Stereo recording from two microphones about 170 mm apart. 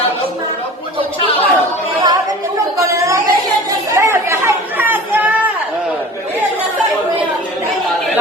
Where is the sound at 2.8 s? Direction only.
20° right (ahead or behind).